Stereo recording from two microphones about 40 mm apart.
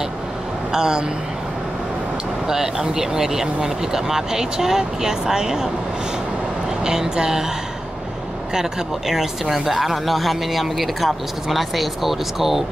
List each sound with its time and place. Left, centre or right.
0.7 s speech: centre
2.4 s speech: centre
6.8 s speech: centre
8.5 s speech: centre